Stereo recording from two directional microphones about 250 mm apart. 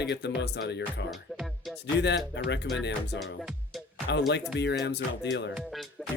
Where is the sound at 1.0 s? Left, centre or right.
Centre.